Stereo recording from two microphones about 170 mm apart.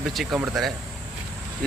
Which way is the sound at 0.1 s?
Centre (ahead or behind).